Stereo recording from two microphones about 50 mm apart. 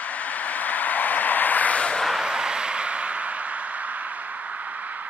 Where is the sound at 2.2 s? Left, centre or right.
Centre.